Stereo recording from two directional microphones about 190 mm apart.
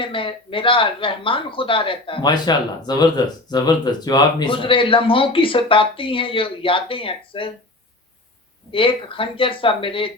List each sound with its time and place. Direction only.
0.0 s speech: 25° left (ahead or behind)
8.7 s speech: 25° left (ahead or behind)